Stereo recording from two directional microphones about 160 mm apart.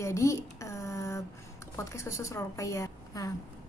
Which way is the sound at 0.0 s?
20° left (ahead or behind).